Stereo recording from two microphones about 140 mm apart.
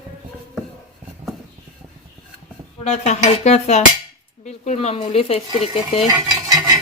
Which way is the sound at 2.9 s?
55° left (ahead or behind).